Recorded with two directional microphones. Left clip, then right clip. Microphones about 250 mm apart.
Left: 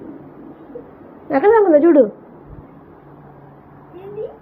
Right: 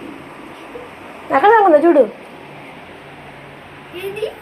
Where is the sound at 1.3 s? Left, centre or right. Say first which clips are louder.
Right 2 dB; centre.